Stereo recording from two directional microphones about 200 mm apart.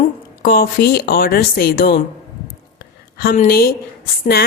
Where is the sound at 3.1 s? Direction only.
45° left (ahead or behind).